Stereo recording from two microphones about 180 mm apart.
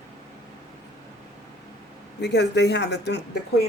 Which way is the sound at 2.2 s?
70° left (ahead or behind).